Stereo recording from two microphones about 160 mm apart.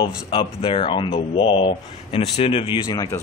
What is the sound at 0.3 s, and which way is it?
Speech, 35° left (ahead or behind).